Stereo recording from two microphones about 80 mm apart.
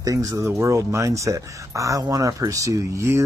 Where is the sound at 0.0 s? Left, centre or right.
Right.